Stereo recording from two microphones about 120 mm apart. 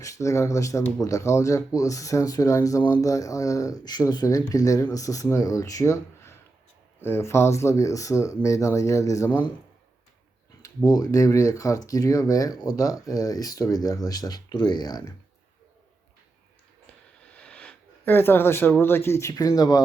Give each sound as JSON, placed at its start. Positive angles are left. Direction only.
{"t": 0.0, "sound": "speech", "side_deg": 25}
{"t": 10.6, "sound": "speech", "side_deg": 30}
{"t": 17.3, "sound": "speech", "side_deg": 10}